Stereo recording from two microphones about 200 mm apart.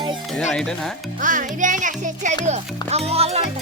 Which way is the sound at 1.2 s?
40° right (ahead or behind).